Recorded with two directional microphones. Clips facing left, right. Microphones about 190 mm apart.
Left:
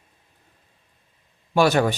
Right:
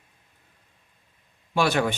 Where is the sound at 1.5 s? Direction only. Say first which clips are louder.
Left 5 dB; 40° left (ahead or behind).